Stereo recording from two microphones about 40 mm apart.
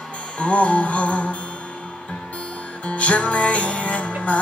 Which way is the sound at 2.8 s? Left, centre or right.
Left.